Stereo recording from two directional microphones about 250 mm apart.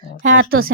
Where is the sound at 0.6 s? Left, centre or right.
Right.